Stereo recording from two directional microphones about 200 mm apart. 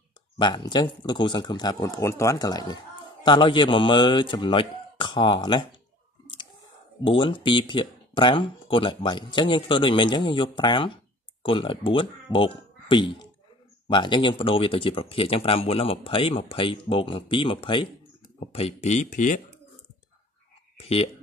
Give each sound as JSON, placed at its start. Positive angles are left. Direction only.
{"t": 0.4, "sound": "speech", "side_deg": 20}
{"t": 7.0, "sound": "speech", "side_deg": 25}
{"t": 20.7, "sound": "speech", "side_deg": 30}